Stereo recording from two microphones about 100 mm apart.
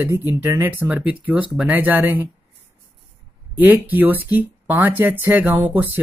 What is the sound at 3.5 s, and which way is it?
Speech, 15° right (ahead or behind).